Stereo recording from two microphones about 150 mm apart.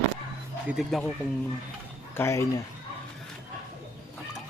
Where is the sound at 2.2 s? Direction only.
20° left (ahead or behind).